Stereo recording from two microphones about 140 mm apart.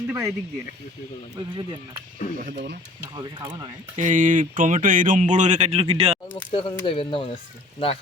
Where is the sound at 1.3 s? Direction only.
30° right (ahead or behind).